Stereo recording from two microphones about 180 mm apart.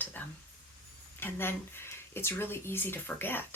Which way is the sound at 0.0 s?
10° left (ahead or behind).